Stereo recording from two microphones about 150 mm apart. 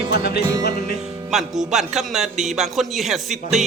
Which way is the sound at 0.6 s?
90° left.